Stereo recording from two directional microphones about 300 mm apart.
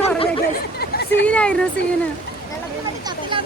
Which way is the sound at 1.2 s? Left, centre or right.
Centre.